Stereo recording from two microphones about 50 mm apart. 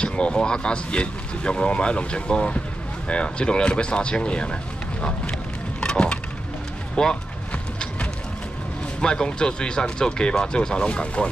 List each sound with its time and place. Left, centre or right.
0.0 s speech: centre
5.8 s a sound: centre
7.0 s speech: centre
9.0 s speech: centre